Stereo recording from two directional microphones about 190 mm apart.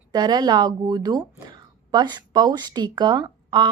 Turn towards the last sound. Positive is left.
turn(degrees=-20)  # may be behind; listen again after turning